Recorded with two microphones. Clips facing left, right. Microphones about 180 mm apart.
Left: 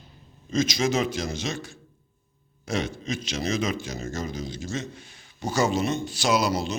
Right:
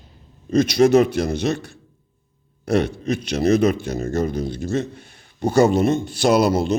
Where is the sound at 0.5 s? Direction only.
60° right (ahead or behind).